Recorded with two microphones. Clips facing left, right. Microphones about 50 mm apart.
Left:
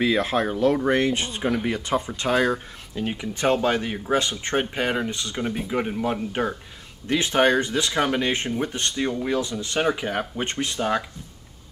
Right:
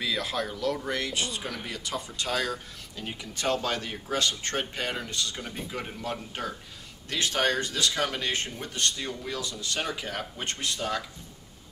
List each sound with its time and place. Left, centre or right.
0.0 s speech: left